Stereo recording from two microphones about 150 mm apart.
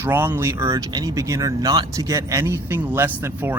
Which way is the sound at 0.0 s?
15° right (ahead or behind).